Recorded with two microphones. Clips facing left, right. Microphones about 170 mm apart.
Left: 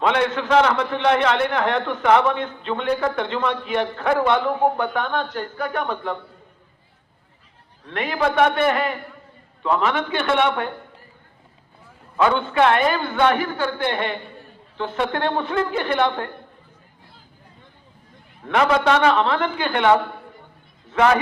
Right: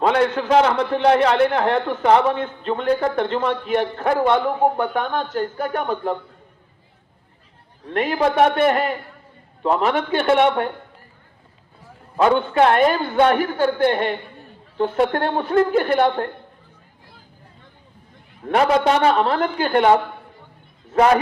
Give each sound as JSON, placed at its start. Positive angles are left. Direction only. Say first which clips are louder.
{"t": 0.0, "sound": "a man's voice", "louder": "right 2 dB", "side_deg": -35}
{"t": 7.9, "sound": "a man's voice", "louder": "right 3 dB", "side_deg": -40}
{"t": 12.1, "sound": "a man's voice", "louder": "right 2 dB", "side_deg": -35}
{"t": 19.0, "sound": "a man's voice", "louder": "right 1 dB", "side_deg": -40}